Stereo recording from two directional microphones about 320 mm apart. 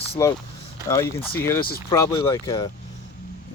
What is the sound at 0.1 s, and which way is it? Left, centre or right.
Speech, centre.